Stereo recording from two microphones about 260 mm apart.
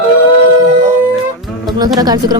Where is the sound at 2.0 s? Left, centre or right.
Centre.